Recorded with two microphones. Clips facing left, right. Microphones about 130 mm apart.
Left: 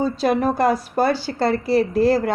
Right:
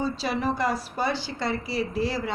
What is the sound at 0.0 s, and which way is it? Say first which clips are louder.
A woman's voice: left 8 dB; 50° left (ahead or behind).